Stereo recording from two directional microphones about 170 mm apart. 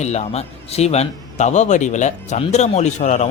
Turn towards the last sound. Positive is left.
turn(degrees=40)  # may be behind; listen again after turning